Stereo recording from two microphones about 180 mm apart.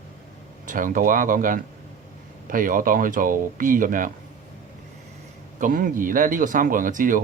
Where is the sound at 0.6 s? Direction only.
50° right (ahead or behind).